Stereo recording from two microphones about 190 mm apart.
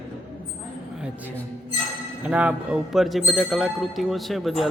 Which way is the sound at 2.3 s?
10° right (ahead or behind).